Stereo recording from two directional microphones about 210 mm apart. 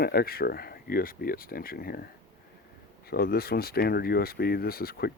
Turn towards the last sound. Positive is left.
turn(degrees=45)  # may be behind; listen again after turning